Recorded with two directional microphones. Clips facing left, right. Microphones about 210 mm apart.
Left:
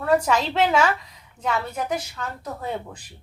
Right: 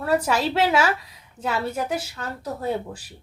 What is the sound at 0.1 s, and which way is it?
A woman's voice, 5° right (ahead or behind).